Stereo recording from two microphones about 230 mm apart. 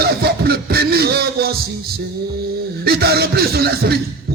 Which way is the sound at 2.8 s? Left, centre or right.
Right.